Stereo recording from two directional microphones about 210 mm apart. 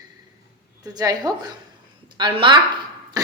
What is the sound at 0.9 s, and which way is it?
A woman's voice, 15° right (ahead or behind).